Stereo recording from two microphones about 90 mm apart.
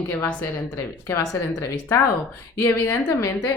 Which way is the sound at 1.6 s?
35° left (ahead or behind).